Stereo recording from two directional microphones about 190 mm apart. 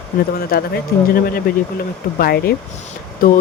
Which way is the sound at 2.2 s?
55° left (ahead or behind).